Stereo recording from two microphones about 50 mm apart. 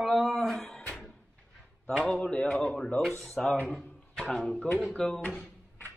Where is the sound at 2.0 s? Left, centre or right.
Left.